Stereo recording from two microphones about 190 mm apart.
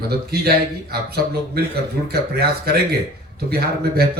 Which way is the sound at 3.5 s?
55° right (ahead or behind).